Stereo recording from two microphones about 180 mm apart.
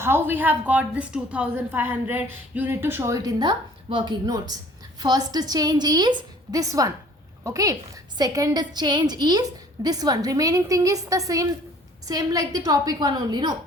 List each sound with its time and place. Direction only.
0.0 s a woman's voice: 10° right (ahead or behind)